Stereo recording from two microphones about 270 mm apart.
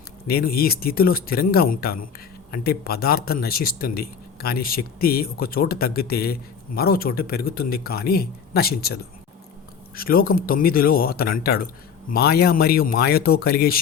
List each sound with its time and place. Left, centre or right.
0.3 s a man's voice: left